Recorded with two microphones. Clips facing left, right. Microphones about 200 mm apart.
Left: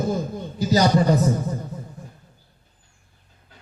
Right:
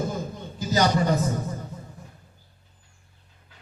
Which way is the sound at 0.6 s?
35° left (ahead or behind).